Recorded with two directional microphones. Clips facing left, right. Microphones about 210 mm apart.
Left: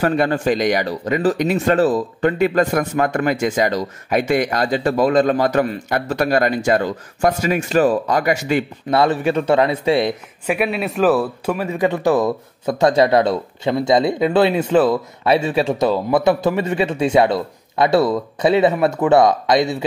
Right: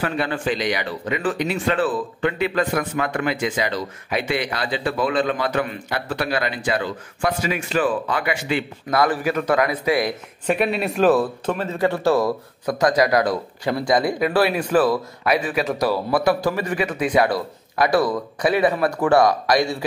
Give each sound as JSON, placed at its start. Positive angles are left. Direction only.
{"t": 0.0, "sound": "speech", "side_deg": 45}
{"t": 8.9, "sound": "a man's voice", "side_deg": 25}
{"t": 10.4, "sound": "a man's voice", "side_deg": 5}